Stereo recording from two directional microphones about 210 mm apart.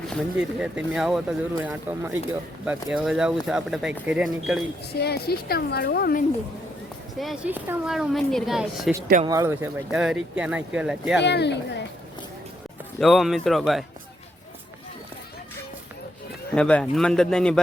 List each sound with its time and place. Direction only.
0.1 s speech: 5° right (ahead or behind)
4.9 s a woman's voice: 50° left (ahead or behind)
7.2 s speech: 5° right (ahead or behind)
9.2 s speech: 15° right (ahead or behind)
11.2 s speech: 55° left (ahead or behind)
13.0 s speech: centre (ahead or behind)
16.6 s speech: 5° left (ahead or behind)